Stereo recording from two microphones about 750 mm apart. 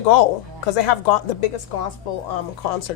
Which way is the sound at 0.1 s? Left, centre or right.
Left.